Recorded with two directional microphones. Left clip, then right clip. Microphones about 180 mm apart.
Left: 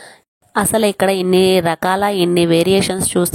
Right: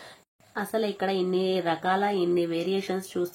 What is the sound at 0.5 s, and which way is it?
A woman's voice, 75° left (ahead or behind).